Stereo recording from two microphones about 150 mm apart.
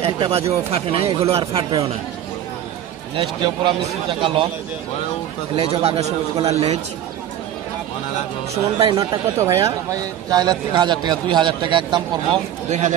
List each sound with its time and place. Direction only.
0.0 s a man's voice: 40° right (ahead or behind)
3.2 s a man's voice: 35° right (ahead or behind)
5.6 s a man's voice: 40° right (ahead or behind)
8.7 s a man's voice: 30° right (ahead or behind)
12.6 s speech: 50° right (ahead or behind)